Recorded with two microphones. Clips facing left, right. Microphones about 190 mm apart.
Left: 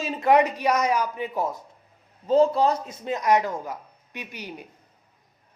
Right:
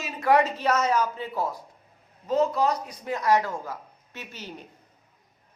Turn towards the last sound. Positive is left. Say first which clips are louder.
# left 3 dB
turn(degrees=15)  # may be behind; listen again after turning